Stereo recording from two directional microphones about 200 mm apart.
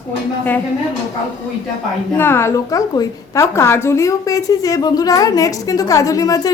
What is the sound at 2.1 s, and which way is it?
A woman's voice, 10° left (ahead or behind).